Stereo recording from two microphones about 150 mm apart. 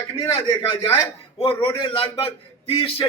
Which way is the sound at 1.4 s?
35° left (ahead or behind).